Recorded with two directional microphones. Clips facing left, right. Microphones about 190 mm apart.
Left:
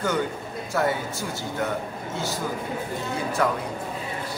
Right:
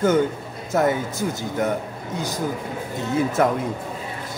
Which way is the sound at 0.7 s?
20° right (ahead or behind).